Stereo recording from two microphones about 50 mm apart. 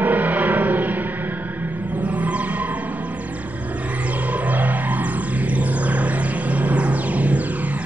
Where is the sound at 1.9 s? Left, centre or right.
Right.